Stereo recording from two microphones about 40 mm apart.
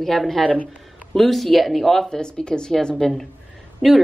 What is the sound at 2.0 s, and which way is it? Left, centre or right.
Speech, left.